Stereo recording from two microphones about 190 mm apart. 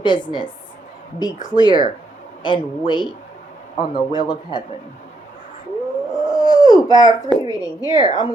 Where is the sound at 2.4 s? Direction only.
25° left (ahead or behind).